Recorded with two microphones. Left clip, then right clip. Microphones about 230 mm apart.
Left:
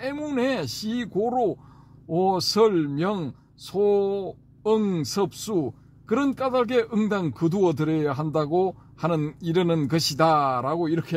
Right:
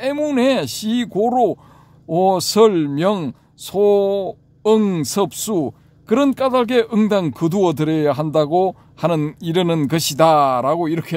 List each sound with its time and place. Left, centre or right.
0.0 s speech: right